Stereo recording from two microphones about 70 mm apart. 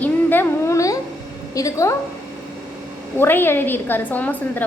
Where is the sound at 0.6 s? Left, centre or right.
Left.